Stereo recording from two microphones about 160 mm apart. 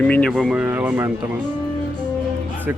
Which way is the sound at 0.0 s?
10° left (ahead or behind).